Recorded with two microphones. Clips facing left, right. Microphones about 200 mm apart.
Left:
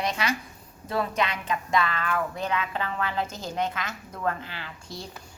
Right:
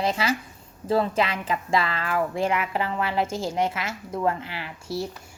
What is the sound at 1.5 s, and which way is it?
Music, 30° right (ahead or behind).